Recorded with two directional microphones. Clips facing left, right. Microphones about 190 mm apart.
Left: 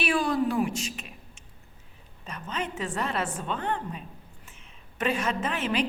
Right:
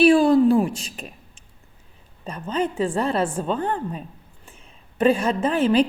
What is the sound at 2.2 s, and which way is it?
A woman's voice, 30° right (ahead or behind).